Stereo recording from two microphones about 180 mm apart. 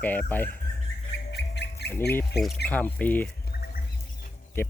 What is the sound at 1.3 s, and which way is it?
Squawk, 70° left (ahead or behind).